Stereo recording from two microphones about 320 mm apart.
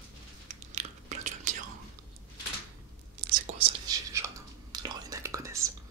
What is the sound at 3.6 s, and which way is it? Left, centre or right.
Whispering, centre.